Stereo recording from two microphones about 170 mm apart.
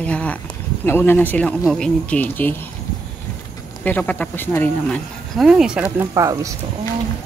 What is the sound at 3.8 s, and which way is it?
Speech, 10° left (ahead or behind).